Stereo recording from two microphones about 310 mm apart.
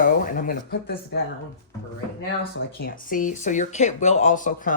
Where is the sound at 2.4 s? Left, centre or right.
Left.